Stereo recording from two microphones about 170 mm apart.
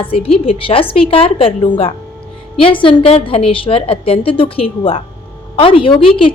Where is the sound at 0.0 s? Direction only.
35° left (ahead or behind).